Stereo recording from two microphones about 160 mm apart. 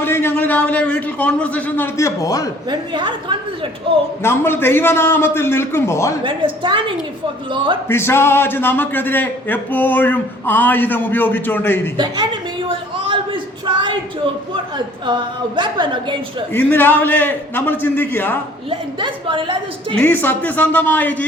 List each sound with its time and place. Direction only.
0.0 s a man's voice: 15° left (ahead or behind)
2.6 s a woman's voice: 30° right (ahead or behind)
4.2 s a man's voice: 15° left (ahead or behind)
6.2 s a woman's voice: 30° right (ahead or behind)
7.9 s a man's voice: 15° left (ahead or behind)
11.9 s a sound: 30° right (ahead or behind)
15.5 s a woman's voice: 30° right (ahead or behind)
16.5 s a man's voice: 15° left (ahead or behind)
18.7 s a woman's voice: 30° right (ahead or behind)
20.0 s a man's voice: 10° left (ahead or behind)